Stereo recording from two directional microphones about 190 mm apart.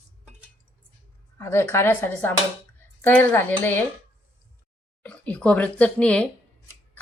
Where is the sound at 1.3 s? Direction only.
15° left (ahead or behind).